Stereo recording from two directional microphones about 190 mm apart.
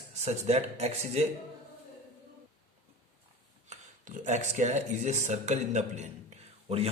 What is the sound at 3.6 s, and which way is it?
A man's voice, 40° right (ahead or behind).